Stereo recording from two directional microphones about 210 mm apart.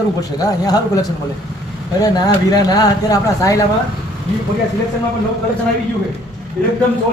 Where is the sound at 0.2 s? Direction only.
15° left (ahead or behind).